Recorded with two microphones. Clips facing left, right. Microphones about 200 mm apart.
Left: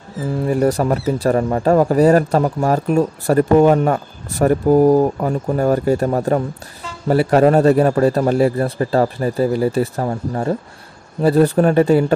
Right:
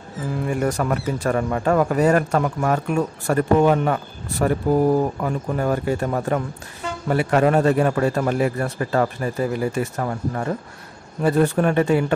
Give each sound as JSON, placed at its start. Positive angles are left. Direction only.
{"t": 0.5, "sound": "speech", "side_deg": 35}